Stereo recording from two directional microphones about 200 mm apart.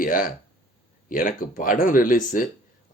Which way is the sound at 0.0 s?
45° left (ahead or behind).